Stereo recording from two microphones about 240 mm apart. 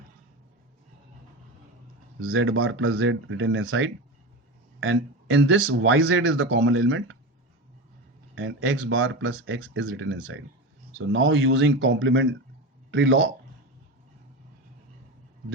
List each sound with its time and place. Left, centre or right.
2.1 s speech: right
8.4 s speech: right